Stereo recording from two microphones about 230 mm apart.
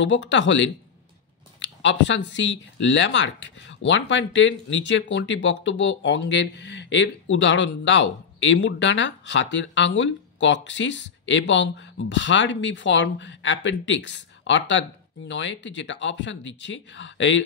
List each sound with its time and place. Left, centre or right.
0.0 s speech: left